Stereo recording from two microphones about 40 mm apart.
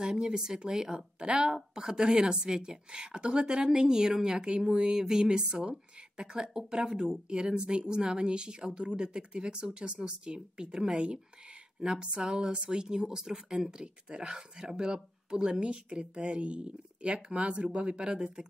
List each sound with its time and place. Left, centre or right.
0.0 s speech: centre